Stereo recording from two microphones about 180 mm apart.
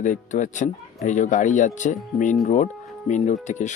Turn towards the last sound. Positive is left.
turn(degrees=40)  # may be behind; listen again after turning